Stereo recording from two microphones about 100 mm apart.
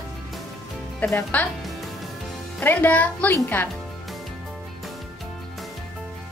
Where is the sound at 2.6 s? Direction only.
15° left (ahead or behind).